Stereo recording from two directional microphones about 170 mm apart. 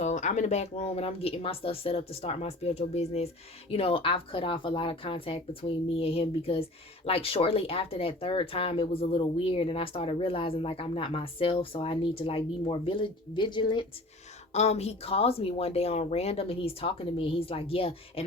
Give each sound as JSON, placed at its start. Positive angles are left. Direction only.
{"t": 0.0, "sound": "speech", "side_deg": 45}
{"t": 14.5, "sound": "speech", "side_deg": 40}